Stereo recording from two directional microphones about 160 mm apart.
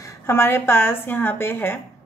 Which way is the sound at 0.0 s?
15° left (ahead or behind).